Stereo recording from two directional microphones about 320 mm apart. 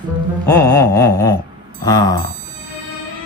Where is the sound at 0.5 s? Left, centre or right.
Centre.